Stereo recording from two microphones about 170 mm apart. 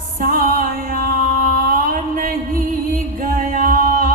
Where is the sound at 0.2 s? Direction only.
55° right (ahead or behind).